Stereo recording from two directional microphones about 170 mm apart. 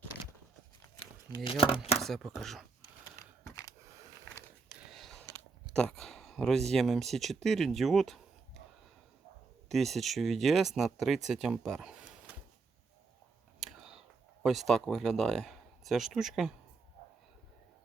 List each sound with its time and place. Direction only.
1.5 s speech: 35° left (ahead or behind)
2.0 s speech: centre (ahead or behind)
3.2 s a sound: 20° left (ahead or behind)
4.9 s a sound: centre (ahead or behind)
5.7 s speech: 5° left (ahead or behind)
9.6 s speech: centre (ahead or behind)
13.6 s clicking: 5° right (ahead or behind)
14.4 s speech: centre (ahead or behind)